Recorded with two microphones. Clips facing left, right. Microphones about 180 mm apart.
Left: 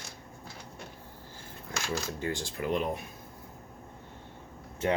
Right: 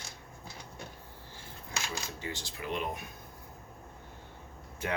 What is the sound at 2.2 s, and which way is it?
Speech, 50° left (ahead or behind).